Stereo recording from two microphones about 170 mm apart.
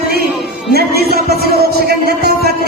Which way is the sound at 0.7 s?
65° right (ahead or behind).